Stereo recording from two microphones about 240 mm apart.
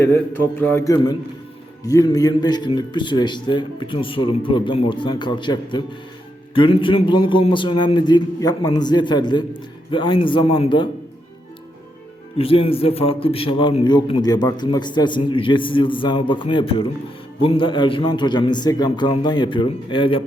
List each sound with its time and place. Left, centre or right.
0.0 s mantra: centre
1.9 s a man's voice: centre
12.4 s a man's voice: left